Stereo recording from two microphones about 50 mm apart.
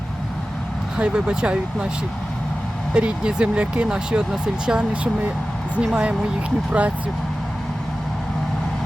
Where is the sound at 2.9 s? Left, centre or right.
Centre.